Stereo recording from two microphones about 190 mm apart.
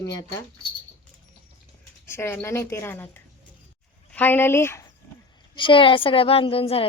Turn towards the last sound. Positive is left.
turn(degrees=30)  # may be behind; listen again after turning